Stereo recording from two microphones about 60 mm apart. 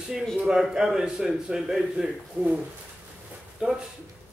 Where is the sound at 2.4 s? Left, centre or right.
Right.